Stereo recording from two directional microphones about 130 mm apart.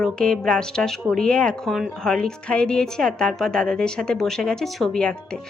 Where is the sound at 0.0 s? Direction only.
5° left (ahead or behind).